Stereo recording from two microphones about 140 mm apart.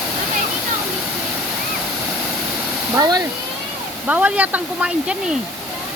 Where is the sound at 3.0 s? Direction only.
30° right (ahead or behind).